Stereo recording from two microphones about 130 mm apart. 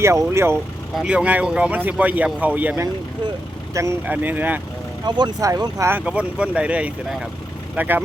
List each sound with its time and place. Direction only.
0.0 s speech: 20° right (ahead or behind)
0.9 s speech: 10° right (ahead or behind)
5.0 s speech: 35° right (ahead or behind)
6.1 s speech: 10° right (ahead or behind)